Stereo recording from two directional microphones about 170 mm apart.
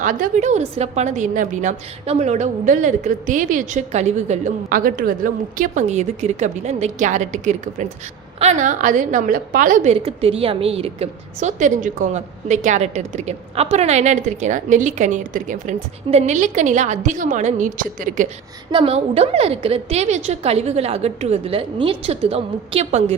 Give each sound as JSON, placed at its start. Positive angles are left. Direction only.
{"t": 0.0, "sound": "a woman's voice", "side_deg": -50}
{"t": 10.0, "sound": "a woman's voice", "side_deg": -35}
{"t": 18.7, "sound": "a woman's voice", "side_deg": -35}